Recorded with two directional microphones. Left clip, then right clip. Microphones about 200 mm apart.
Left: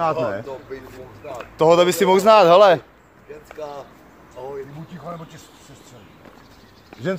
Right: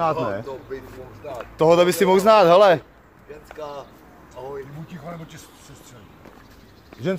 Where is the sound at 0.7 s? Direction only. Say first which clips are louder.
Right 1 dB; 25° right (ahead or behind).